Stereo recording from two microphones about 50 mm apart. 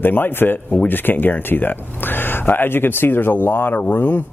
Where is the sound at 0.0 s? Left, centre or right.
Left.